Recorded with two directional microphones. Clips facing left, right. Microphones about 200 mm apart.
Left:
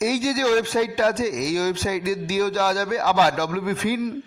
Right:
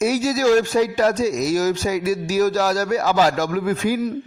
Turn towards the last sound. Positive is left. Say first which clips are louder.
# right 3 dB
turn(degrees=-40)  # may be behind; listen again after turning